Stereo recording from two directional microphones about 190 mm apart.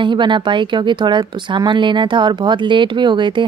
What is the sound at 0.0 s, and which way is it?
Speech, 25° right (ahead or behind).